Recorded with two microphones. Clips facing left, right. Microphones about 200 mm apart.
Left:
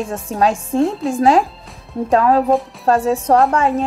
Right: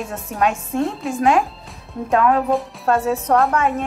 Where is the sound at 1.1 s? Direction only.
30° left (ahead or behind).